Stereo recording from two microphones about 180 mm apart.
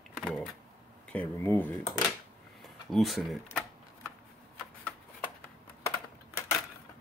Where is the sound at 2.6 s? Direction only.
Centre (ahead or behind).